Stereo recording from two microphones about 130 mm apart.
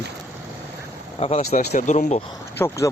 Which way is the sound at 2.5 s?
20° left (ahead or behind).